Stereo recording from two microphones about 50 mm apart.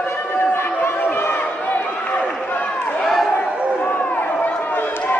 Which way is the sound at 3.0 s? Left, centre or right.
Centre.